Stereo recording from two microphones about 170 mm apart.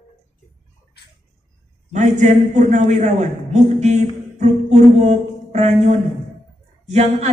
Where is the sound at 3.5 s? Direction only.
40° right (ahead or behind).